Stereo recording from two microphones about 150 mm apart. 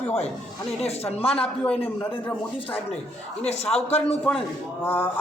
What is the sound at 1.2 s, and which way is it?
Speech, 40° left (ahead or behind).